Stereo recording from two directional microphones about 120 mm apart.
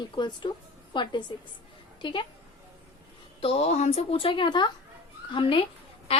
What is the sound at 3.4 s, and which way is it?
A woman's voice, 60° left (ahead or behind).